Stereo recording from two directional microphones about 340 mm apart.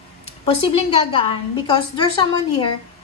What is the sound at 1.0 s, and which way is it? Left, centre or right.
A woman's voice, centre.